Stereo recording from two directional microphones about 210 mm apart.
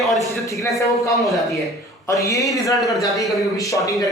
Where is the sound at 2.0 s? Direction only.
15° left (ahead or behind).